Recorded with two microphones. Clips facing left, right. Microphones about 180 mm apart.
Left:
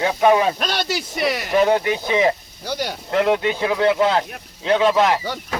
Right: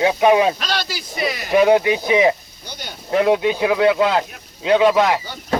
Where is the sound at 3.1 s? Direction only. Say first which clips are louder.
Right 3 dB; 15° right (ahead or behind).